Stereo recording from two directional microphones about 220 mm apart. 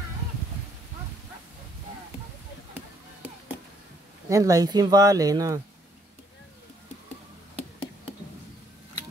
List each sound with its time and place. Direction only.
4.3 s speech: 15° right (ahead or behind)